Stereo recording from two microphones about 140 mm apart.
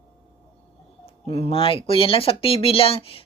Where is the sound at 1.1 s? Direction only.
45° left (ahead or behind).